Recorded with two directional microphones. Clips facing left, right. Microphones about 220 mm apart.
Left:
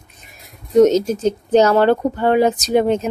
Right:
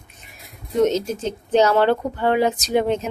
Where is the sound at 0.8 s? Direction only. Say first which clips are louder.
Left 6 dB; 40° left (ahead or behind).